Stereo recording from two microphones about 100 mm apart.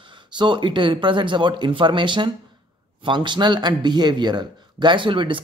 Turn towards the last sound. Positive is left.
turn(degrees=-55)  # may be behind; listen again after turning